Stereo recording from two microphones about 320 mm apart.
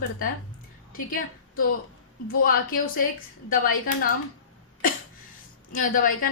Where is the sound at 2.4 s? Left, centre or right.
Left.